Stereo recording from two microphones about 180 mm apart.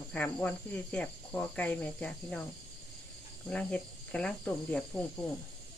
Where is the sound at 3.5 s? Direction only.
5° left (ahead or behind).